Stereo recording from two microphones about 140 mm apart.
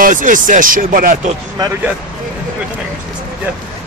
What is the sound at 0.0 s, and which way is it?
Speech, 70° right (ahead or behind).